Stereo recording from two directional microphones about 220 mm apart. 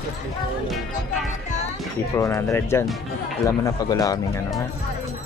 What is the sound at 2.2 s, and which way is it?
Speech, 10° left (ahead or behind).